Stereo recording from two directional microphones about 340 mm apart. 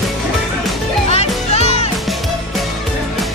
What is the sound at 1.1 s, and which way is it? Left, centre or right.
Music, centre.